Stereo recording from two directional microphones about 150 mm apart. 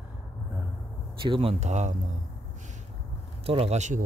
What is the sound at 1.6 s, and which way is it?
Speech, 50° right (ahead or behind).